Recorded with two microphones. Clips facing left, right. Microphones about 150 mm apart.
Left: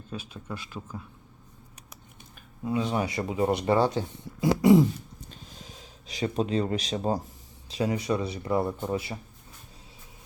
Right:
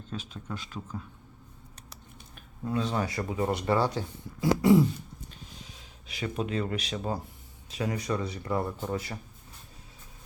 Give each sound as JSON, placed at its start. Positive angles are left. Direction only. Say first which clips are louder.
{"t": 0.1, "sound": "speech", "louder": "left 1 dB", "side_deg": 5}
{"t": 2.6, "sound": "speech", "louder": "left 2 dB", "side_deg": 15}
{"t": 5.6, "sound": "speech", "louder": "left 4 dB", "side_deg": 35}
{"t": 8.3, "sound": "speech", "louder": "left 4 dB", "side_deg": 15}